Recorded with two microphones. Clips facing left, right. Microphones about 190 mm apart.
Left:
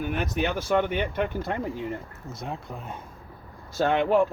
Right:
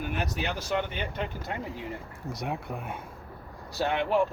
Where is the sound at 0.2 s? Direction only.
55° left (ahead or behind).